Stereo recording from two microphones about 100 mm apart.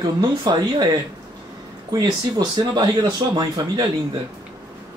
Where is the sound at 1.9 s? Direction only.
45° right (ahead or behind).